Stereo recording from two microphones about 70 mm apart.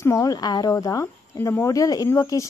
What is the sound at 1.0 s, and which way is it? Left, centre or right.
Speech, left.